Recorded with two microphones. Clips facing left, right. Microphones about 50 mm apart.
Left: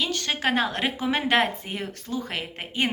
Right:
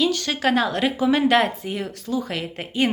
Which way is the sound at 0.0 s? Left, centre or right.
Left.